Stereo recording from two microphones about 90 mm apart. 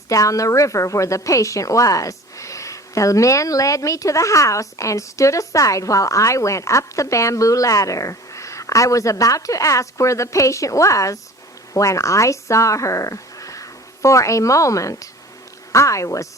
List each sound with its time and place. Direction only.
0.1 s a woman's voice: 40° left (ahead or behind)